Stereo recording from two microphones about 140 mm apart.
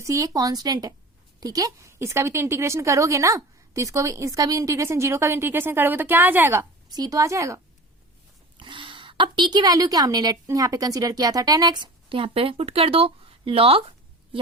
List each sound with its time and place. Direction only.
0.0 s a woman's voice: 25° right (ahead or behind)
8.5 s a woman's voice: 35° right (ahead or behind)